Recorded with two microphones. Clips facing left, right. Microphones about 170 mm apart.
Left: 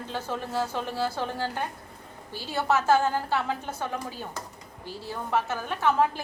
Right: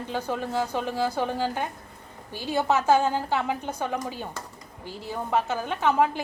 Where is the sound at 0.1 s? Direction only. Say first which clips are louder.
Right 3 dB; 15° right (ahead or behind).